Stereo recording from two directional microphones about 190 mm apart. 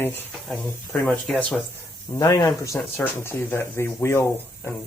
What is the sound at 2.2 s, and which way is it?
Speech, 15° left (ahead or behind).